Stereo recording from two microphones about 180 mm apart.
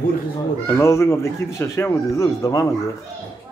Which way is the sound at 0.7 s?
15° left (ahead or behind).